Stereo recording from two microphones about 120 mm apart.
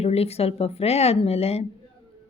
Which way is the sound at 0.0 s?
60° left (ahead or behind).